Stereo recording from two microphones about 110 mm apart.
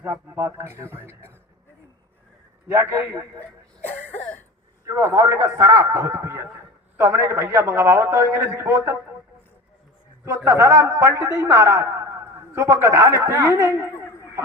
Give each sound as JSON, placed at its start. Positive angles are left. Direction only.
{"t": 0.0, "sound": "a man's voice", "side_deg": -20}
{"t": 2.7, "sound": "a man's voice", "side_deg": -20}
{"t": 4.9, "sound": "a man's voice", "side_deg": -25}
{"t": 10.2, "sound": "a man's voice", "side_deg": -25}